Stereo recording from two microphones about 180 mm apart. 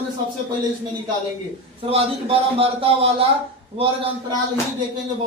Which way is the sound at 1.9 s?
35° right (ahead or behind).